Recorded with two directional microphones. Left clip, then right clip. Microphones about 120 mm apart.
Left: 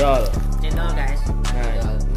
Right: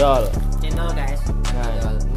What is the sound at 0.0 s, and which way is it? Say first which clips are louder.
Music: right 2 dB; centre (ahead or behind).